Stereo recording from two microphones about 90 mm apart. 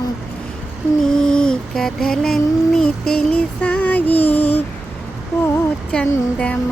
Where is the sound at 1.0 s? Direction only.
5° left (ahead or behind).